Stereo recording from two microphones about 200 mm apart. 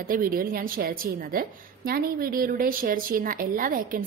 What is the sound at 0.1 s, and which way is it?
A woman's voice, 45° right (ahead or behind).